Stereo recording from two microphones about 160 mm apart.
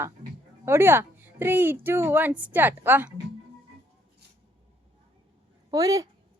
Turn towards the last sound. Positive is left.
turn(degrees=-20)  # may be behind; listen again after turning